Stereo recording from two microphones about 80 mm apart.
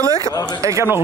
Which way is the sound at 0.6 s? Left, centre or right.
Right.